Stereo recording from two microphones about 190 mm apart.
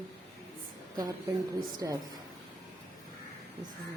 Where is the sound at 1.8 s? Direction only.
15° right (ahead or behind).